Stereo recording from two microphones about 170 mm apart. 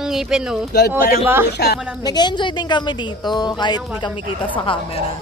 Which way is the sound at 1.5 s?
70° left (ahead or behind).